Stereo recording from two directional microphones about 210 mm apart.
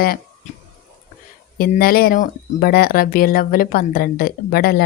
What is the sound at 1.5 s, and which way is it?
Speech, 45° left (ahead or behind).